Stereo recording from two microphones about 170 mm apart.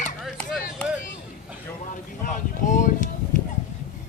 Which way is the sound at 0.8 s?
5° left (ahead or behind).